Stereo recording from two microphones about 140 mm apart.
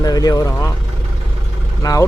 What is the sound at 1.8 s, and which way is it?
Speech, 25° left (ahead or behind).